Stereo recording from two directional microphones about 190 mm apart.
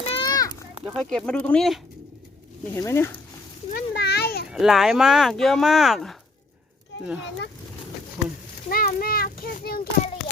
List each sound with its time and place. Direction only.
0.0 s a sound: 25° left (ahead or behind)
0.9 s speech: 5° left (ahead or behind)
2.7 s speech: 15° left (ahead or behind)
3.7 s a child's voice: 55° left (ahead or behind)
4.4 s speech: centre (ahead or behind)
8.7 s children playing: 50° left (ahead or behind)